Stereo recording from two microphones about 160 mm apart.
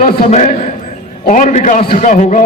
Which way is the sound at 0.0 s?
40° left (ahead or behind).